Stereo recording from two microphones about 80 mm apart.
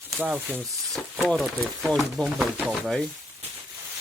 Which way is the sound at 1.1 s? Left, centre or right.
Centre.